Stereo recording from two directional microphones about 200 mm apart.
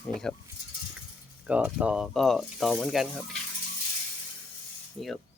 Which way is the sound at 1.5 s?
5° right (ahead or behind).